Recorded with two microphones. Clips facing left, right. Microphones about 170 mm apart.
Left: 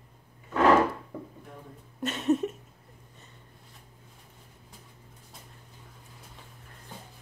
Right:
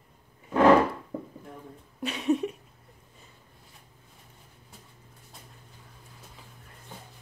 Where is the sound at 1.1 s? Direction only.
30° right (ahead or behind).